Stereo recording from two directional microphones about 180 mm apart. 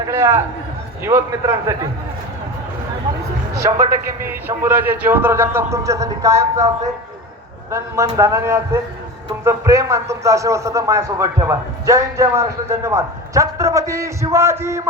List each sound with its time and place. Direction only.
0.1 s a man's voice: 15° right (ahead or behind)
3.8 s a man's voice: 10° right (ahead or behind)
7.7 s a man's voice: 15° right (ahead or behind)